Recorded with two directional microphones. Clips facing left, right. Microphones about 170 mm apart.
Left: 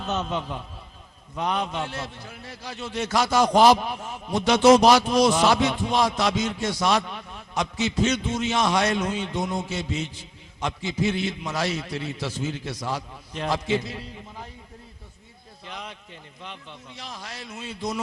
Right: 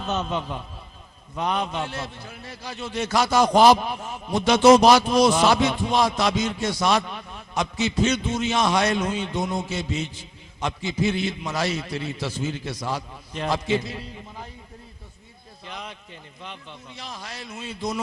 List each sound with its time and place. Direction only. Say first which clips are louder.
0.0 s a man's voice: right 1 dB; 15° right (ahead or behind)
7.0 s a man's voice: right 1 dB; 20° right (ahead or behind)
7.5 s a man's voice: right 1 dB; 10° right (ahead or behind)
15.6 s a man's voice: right 1 dB; 10° right (ahead or behind)
17.2 s a man's voice: right 1 dB; 10° right (ahead or behind)